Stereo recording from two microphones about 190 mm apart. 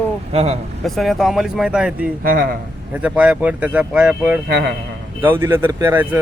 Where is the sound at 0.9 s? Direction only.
Centre (ahead or behind).